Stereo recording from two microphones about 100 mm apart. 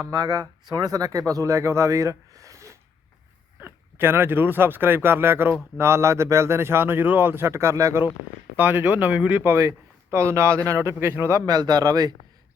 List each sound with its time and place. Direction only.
0.0 s a man's voice: 40° right (ahead or behind)
8.5 s speech: 20° right (ahead or behind)
9.4 s speech: 25° right (ahead or behind)